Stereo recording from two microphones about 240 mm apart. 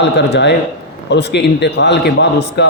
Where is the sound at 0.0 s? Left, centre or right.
Left.